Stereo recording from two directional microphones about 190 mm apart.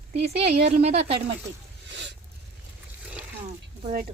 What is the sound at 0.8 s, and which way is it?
Speech, 35° right (ahead or behind).